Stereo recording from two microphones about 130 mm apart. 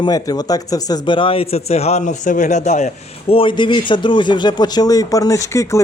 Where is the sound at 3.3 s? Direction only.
40° left (ahead or behind).